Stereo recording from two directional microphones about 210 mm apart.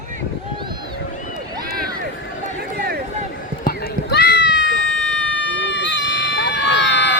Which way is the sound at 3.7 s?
50° left (ahead or behind).